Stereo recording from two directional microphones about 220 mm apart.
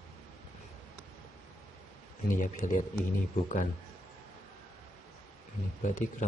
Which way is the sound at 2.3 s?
35° left (ahead or behind).